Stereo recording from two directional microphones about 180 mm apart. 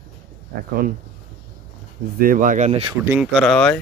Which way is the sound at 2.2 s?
50° right (ahead or behind).